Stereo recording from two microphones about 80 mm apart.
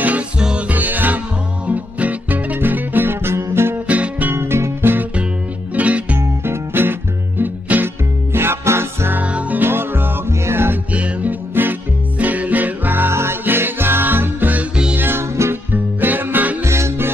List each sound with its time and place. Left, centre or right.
0.4 s music: centre; by 3.7 s right
3.8 s music: centre
5.8 s music: centre
6.1 s music: right
9.2 s music: centre
10.9 s music: centre
15.0 s music: right
16.6 s music: right